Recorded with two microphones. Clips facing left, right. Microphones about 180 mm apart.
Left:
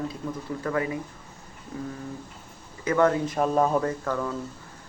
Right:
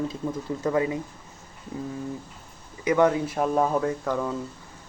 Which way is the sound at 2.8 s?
15° right (ahead or behind).